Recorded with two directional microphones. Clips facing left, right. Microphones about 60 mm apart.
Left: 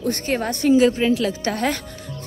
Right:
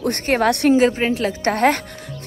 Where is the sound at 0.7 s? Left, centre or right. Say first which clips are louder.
Even; right.